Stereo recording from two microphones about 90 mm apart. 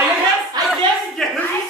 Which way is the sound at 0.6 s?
45° right (ahead or behind).